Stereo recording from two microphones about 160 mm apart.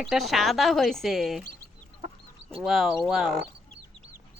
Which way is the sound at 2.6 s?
Centre (ahead or behind).